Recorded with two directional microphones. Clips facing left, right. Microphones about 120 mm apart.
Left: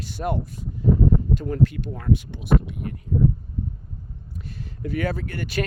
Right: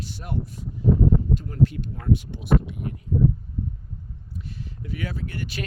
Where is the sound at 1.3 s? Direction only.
75° left (ahead or behind).